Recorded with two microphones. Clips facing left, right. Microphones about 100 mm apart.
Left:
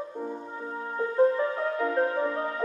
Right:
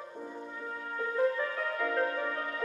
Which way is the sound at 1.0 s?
30° left (ahead or behind).